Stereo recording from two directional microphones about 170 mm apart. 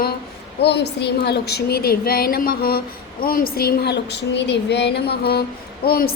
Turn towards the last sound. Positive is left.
turn(degrees=65)  # may be behind; listen again after turning